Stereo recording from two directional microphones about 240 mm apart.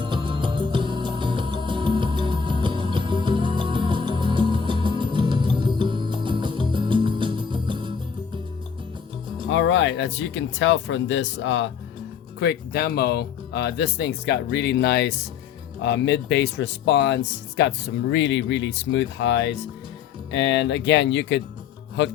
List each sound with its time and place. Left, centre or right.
0.0 s music: right
9.5 s speech: left